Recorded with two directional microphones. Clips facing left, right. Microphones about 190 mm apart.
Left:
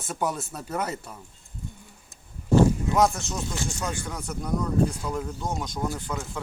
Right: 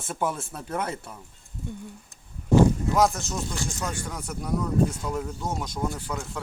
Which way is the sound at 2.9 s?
Centre (ahead or behind).